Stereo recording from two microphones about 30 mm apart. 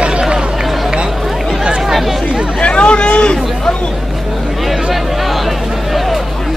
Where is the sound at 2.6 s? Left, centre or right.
Left.